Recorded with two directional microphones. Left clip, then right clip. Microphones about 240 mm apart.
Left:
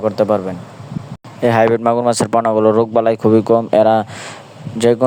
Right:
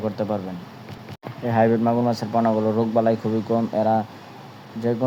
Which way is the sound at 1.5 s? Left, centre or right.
Left.